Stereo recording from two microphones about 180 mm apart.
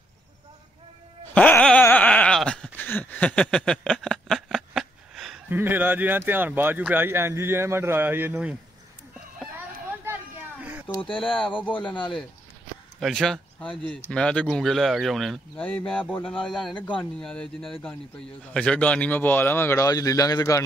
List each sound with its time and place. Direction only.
1.3 s a sound: 10° left (ahead or behind)
5.5 s speech: 10° right (ahead or behind)
10.6 s a sound: 10° right (ahead or behind)
11.6 s speech: 10° left (ahead or behind)
11.9 s speech: 25° left (ahead or behind)
13.0 s speech: centre (ahead or behind); by 20.6 s 20° left (ahead or behind)